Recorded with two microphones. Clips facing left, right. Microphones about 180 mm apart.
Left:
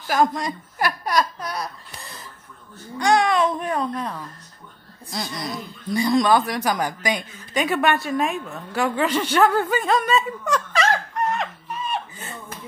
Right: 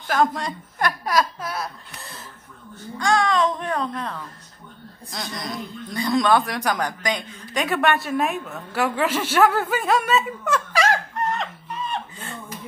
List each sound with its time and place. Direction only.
0.0 s a woman's voice: 5° left (ahead or behind)
3.0 s speech: 15° left (ahead or behind); by 11.0 s 10° right (ahead or behind)
11.3 s a sound: 10° left (ahead or behind)